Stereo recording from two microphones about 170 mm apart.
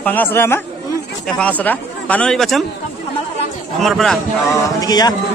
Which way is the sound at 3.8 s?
Centre (ahead or behind).